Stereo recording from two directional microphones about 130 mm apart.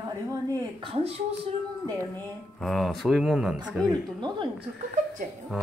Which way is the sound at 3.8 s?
30° right (ahead or behind).